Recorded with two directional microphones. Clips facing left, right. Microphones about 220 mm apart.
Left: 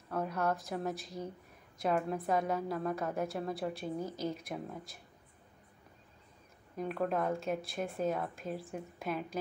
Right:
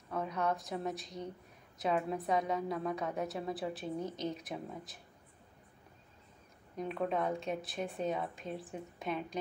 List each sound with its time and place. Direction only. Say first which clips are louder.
0.1 s a woman's voice: left 1 dB; 5° left (ahead or behind)
6.8 s a woman's voice: left 1 dB; centre (ahead or behind)